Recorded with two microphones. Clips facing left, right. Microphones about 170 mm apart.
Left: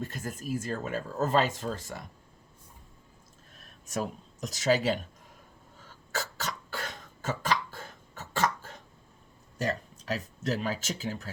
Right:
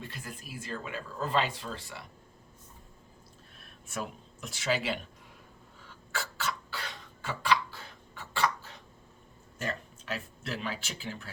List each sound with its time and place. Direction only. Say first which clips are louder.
0.0 s speech: left 7 dB; 45° left (ahead or behind)
3.6 s speech: left 5 dB; 40° left (ahead or behind)
5.8 s cough: left 3 dB; 40° left (ahead or behind)
9.6 s a sound: left 5 dB; 40° left (ahead or behind)